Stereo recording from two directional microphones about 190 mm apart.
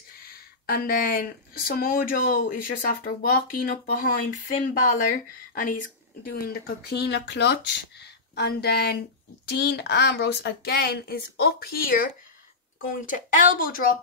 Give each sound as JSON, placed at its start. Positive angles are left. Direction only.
{"t": 0.1, "sound": "speech", "side_deg": 50}